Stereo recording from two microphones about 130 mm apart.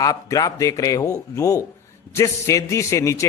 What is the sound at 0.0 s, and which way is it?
Speech, 30° left (ahead or behind).